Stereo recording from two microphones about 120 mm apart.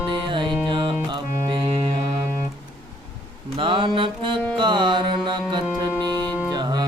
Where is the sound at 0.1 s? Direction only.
40° right (ahead or behind).